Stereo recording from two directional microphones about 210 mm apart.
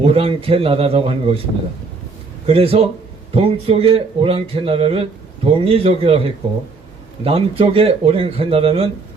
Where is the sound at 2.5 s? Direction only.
25° right (ahead or behind).